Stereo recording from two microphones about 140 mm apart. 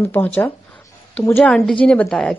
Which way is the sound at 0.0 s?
15° left (ahead or behind).